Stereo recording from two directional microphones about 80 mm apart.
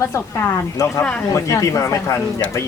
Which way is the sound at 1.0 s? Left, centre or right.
Centre.